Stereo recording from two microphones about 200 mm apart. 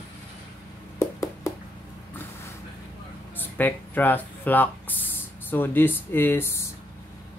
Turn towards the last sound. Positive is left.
turn(degrees=10)  # may be behind; listen again after turning